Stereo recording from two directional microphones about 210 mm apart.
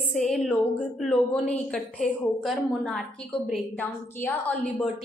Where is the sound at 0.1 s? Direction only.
Centre (ahead or behind).